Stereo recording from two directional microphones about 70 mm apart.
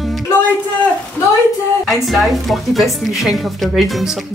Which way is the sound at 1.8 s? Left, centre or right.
Centre.